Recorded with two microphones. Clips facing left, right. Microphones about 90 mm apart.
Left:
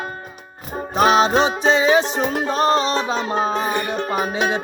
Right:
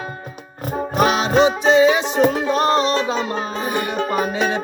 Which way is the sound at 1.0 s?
30° left (ahead or behind).